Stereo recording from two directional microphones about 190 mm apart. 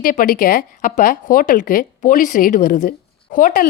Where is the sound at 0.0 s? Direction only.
45° left (ahead or behind).